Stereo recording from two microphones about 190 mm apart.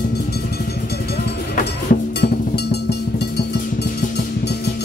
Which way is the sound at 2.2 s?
60° left (ahead or behind).